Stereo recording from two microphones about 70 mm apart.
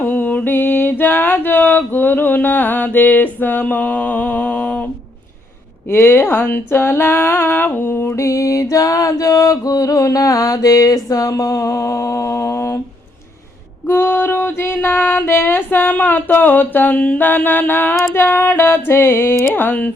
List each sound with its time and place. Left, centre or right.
0.0 s mantra: left
5.9 s a sound: left
8.1 s music: left
9.9 s mantra: left
13.8 s a sound: left
19.5 s music: left